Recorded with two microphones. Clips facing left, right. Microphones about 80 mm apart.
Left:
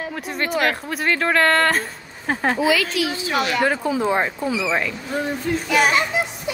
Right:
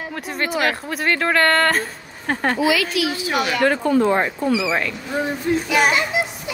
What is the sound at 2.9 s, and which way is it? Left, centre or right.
Speech, left.